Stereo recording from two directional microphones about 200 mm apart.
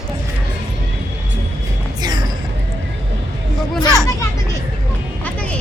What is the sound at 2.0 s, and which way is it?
Music, 20° right (ahead or behind).